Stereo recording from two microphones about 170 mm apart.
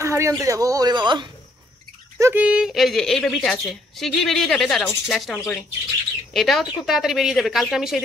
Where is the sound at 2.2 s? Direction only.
10° right (ahead or behind).